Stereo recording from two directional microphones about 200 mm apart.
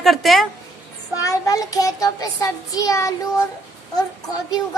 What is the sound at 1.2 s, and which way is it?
A child's voice, 15° left (ahead or behind).